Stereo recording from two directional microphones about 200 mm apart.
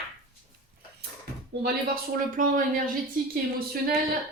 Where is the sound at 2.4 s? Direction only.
40° right (ahead or behind).